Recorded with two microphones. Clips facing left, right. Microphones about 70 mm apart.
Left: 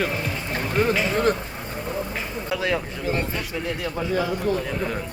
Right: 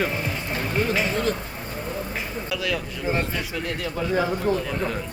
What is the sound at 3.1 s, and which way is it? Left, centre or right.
Speech, right.